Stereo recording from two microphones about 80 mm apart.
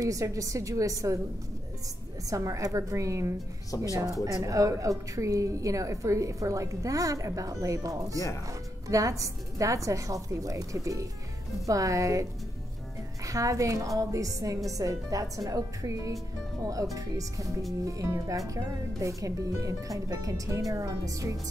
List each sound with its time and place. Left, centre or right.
0.0 s a woman's voice: right
2.2 s a woman's voice: right